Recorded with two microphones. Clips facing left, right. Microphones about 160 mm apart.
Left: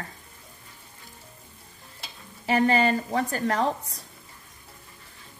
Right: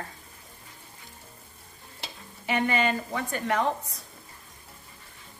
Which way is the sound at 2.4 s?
35° left (ahead or behind).